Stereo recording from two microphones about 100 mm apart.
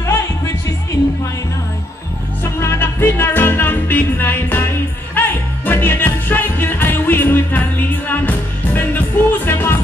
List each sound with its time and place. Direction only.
2.4 s music: 25° left (ahead or behind)